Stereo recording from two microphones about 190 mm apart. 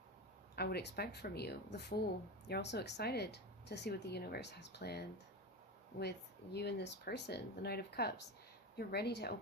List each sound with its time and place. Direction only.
0.5 s speech: 60° left (ahead or behind)